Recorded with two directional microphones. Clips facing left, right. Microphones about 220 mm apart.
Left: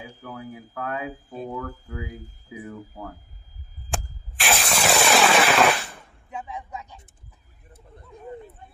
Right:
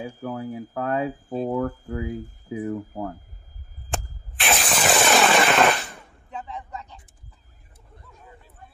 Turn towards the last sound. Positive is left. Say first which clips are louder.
# even
turn(degrees=10)  # may be behind; listen again after turning